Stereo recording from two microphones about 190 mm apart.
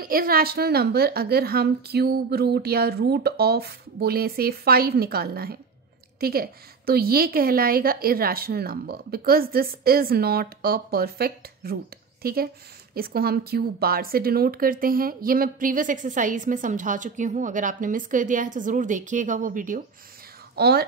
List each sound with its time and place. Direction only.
0.1 s a woman's voice: 50° right (ahead or behind)
20.5 s speech: 55° right (ahead or behind)